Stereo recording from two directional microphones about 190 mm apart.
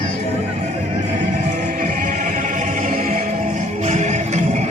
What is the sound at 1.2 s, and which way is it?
Music, 45° right (ahead or behind).